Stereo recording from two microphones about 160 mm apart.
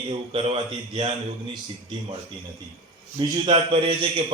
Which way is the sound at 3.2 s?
35° right (ahead or behind).